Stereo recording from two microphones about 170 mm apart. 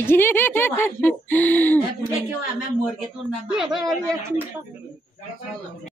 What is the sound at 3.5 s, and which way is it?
Speech, centre (ahead or behind).